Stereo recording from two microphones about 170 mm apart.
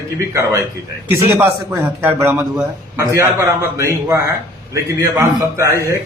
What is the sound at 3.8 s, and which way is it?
A man's voice, 20° right (ahead or behind).